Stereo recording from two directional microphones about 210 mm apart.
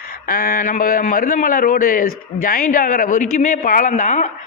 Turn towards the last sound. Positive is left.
turn(degrees=35)  # may be behind; listen again after turning